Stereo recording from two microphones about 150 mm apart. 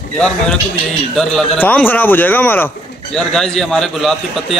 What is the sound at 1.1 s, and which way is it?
A man's voice, 5° left (ahead or behind).